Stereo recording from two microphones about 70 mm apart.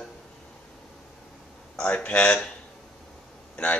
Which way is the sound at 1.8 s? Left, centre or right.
Centre.